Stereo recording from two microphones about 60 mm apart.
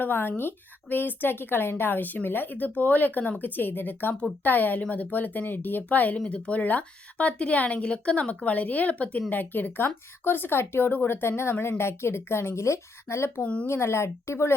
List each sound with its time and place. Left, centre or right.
0.0 s a woman's voice: left
13.4 s speech: centre
13.7 s a woman's voice: left